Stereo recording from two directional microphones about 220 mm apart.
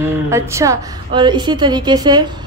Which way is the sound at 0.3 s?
15° right (ahead or behind).